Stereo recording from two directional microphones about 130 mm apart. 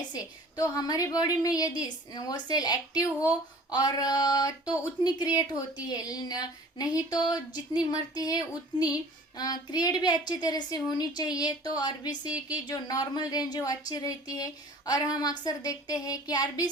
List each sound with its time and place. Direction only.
0.1 s a woman's voice: 30° left (ahead or behind)